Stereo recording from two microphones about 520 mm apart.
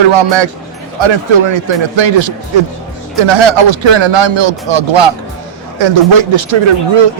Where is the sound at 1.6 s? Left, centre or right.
Right.